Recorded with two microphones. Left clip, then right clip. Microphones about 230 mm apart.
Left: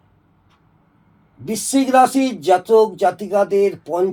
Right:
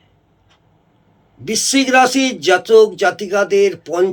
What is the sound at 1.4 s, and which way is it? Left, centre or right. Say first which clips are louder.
Speech: right 4 dB; right.